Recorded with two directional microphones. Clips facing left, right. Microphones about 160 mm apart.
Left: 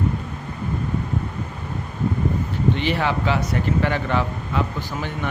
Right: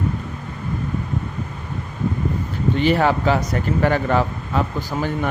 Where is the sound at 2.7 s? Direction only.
45° right (ahead or behind).